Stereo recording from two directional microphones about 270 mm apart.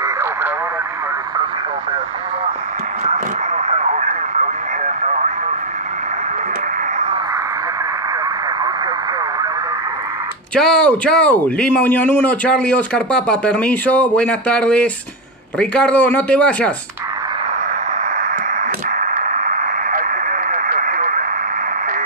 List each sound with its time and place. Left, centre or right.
0.0 s radio: centre
3.1 s radio: right
10.5 s speech: centre
18.9 s radio: right